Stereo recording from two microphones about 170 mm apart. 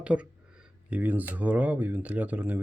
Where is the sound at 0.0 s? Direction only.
5° right (ahead or behind).